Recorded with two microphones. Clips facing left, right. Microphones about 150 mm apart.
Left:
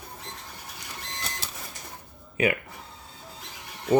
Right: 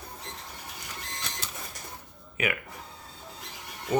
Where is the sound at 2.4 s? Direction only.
30° left (ahead or behind).